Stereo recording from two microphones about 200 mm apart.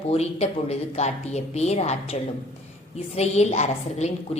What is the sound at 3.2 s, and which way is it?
A woman's voice, 35° left (ahead or behind).